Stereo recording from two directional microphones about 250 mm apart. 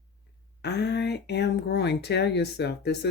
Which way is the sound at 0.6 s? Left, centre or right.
Left.